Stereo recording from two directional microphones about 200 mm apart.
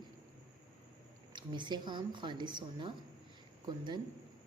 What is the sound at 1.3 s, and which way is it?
Speech, 25° right (ahead or behind).